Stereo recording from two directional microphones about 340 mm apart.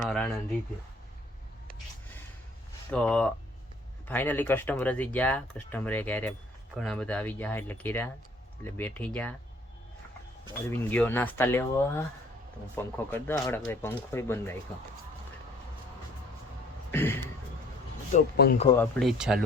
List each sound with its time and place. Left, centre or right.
0.0 s a sound: centre
2.9 s speech: centre
10.7 s speech: centre
16.9 s speech: centre
18.1 s speech: left
18.6 s speech: centre